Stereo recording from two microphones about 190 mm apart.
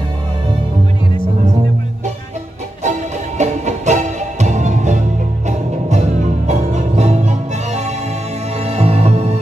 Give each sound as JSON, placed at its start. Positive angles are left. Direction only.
{"t": 3.3, "sound": "music", "side_deg": -40}